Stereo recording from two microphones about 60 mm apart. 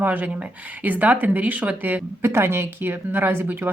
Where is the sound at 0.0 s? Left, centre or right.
Right.